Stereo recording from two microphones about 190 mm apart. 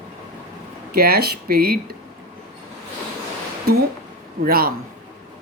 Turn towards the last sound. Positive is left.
turn(degrees=-50)  # may be behind; listen again after turning